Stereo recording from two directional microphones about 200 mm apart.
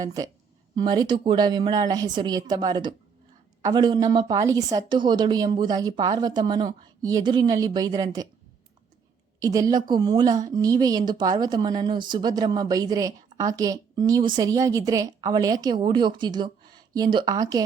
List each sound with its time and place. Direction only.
0.0 s speech: 15° right (ahead or behind)
9.4 s speech: 15° right (ahead or behind)